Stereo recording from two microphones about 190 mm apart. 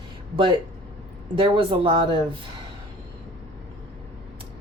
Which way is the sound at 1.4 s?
25° right (ahead or behind).